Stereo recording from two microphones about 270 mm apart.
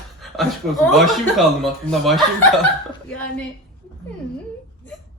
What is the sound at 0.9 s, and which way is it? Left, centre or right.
A woman's voice, centre.